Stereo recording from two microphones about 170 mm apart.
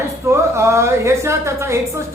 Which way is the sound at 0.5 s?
15° right (ahead or behind).